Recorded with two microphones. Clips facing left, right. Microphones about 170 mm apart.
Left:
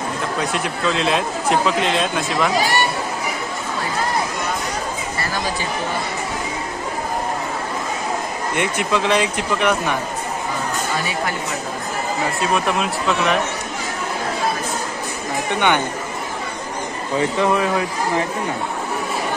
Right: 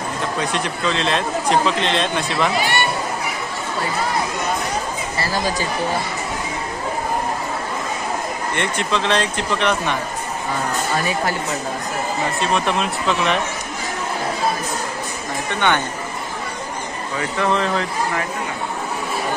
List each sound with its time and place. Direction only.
0.5 s speech: 5° left (ahead or behind)
2.5 s speech: 40° left (ahead or behind)
8.5 s speech: 10° left (ahead or behind)
12.4 s speech: 5° left (ahead or behind)
15.5 s speech: 15° left (ahead or behind)
17.4 s speech: 10° left (ahead or behind)